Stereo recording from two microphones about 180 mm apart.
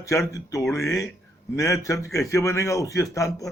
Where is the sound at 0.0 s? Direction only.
15° left (ahead or behind).